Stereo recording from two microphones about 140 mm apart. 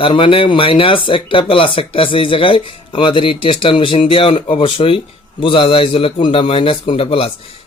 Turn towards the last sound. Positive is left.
turn(degrees=40)  # may be behind; listen again after turning